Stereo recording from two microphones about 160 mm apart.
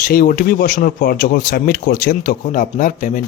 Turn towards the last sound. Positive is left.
turn(degrees=55)  # may be behind; listen again after turning